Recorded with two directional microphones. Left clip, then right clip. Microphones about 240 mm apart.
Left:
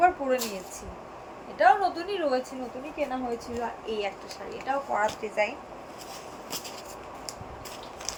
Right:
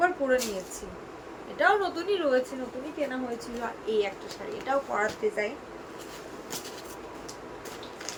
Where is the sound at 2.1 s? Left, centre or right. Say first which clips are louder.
Right 2 dB; centre.